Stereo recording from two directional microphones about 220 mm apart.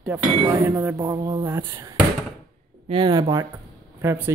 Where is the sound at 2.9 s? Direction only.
20° right (ahead or behind).